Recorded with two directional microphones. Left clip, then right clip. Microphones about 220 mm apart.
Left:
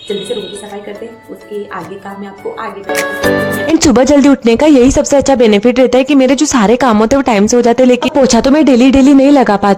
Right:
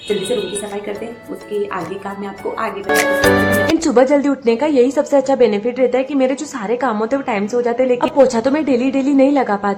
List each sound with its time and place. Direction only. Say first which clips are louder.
2.6 s speech: even; centre (ahead or behind)
3.8 s speech: left 8 dB; 40° left (ahead or behind)